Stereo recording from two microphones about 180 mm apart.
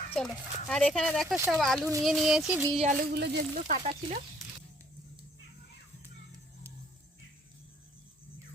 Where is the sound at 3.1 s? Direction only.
65° right (ahead or behind).